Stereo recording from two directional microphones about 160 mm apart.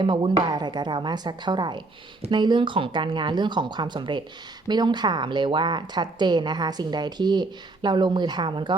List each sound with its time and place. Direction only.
0.0 s speech: 30° right (ahead or behind)